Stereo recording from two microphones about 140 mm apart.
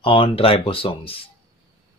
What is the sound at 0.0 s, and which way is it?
Speech, 40° left (ahead or behind).